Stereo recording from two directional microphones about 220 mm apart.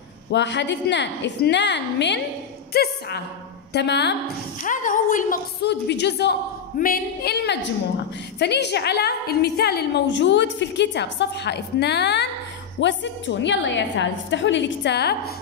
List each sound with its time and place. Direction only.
0.3 s a woman's voice: 50° left (ahead or behind)
4.6 s a woman's voice: 35° left (ahead or behind)